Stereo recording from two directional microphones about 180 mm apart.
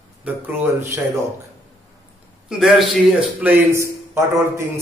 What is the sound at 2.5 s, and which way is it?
A man's voice, 5° right (ahead or behind).